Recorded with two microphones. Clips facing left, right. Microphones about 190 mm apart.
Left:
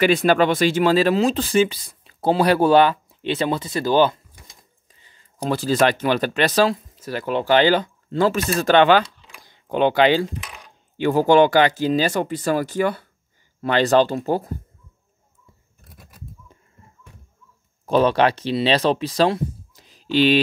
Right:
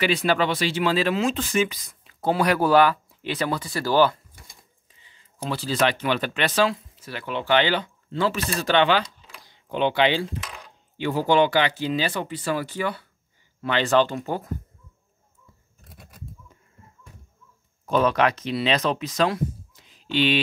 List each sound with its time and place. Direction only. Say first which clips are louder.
0.0 s speech: left 6 dB; 50° left (ahead or behind); by 4.2 s 20° left (ahead or behind)
5.0 s speech: left 6 dB; 45° left (ahead or behind)
17.8 s speech: left 4 dB; 30° left (ahead or behind)